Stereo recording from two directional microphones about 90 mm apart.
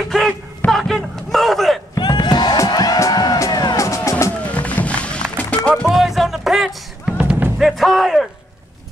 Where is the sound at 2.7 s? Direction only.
45° left (ahead or behind).